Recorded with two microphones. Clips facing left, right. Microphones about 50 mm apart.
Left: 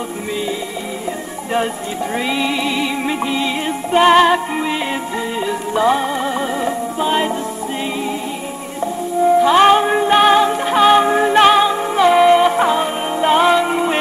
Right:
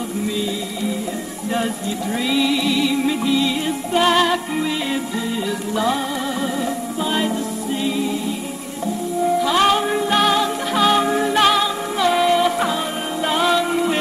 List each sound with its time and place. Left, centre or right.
2.1 s music: left
5.8 s music: left
9.4 s music: left